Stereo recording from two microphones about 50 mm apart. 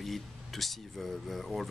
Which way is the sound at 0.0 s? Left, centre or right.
Centre.